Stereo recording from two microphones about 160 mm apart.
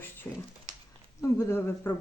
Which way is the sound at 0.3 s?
15° left (ahead or behind).